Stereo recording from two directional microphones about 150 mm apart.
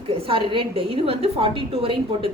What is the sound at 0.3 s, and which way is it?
A woman's voice, 35° right (ahead or behind).